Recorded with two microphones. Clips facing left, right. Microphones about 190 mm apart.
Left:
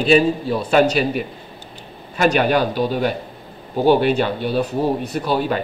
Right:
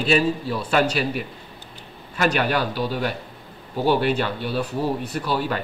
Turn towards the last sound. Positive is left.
turn(degrees=20)  # may be behind; listen again after turning